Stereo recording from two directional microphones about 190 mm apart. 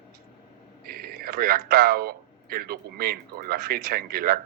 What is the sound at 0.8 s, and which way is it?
A man's voice, 55° right (ahead or behind).